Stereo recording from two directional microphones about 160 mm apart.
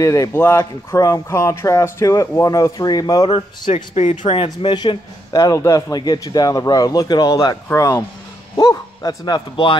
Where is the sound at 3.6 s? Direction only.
45° left (ahead or behind).